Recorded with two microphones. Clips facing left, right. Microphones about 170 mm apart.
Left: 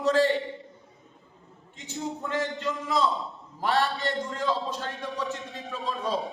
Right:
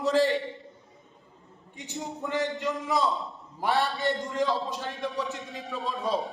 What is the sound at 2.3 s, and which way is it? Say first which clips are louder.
A man's voice: right 3 dB; 20° right (ahead or behind).